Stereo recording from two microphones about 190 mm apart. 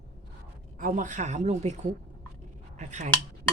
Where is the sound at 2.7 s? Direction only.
40° right (ahead or behind).